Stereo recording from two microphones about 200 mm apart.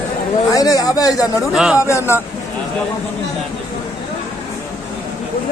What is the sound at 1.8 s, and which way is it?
Speech, 15° left (ahead or behind).